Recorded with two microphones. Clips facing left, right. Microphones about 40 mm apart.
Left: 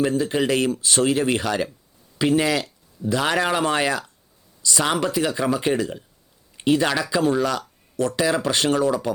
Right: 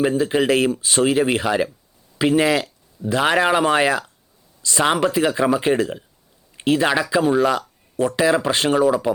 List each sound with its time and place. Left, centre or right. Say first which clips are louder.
0.0 s speech: right 3 dB; centre